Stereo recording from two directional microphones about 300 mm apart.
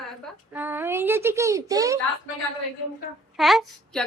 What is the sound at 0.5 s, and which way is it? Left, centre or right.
A woman's voice, centre.